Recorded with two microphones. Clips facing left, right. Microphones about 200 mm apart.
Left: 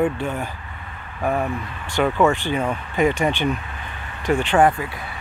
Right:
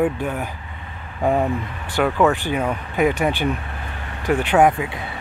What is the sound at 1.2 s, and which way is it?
Speech, 20° right (ahead or behind).